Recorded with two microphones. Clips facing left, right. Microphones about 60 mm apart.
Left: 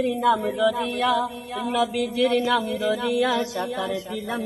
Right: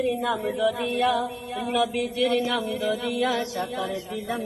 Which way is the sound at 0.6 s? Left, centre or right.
Left.